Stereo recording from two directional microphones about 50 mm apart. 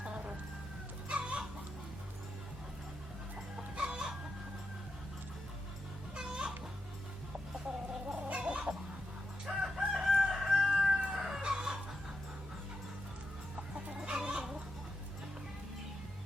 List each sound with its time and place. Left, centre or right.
0.0 s chicken: right
3.8 s chicken: centre
6.1 s music: centre
8.0 s chicken: centre
9.5 s crowing: centre
10.9 s music: centre
11.2 s chicken: centre
11.5 s a sound: centre
13.6 s chicken: centre